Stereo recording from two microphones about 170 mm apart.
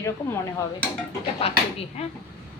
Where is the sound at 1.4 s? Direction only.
35° left (ahead or behind).